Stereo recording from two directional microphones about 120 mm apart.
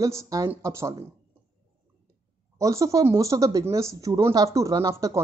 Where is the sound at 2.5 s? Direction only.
25° right (ahead or behind).